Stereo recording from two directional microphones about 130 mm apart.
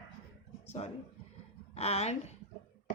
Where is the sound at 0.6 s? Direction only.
60° left (ahead or behind).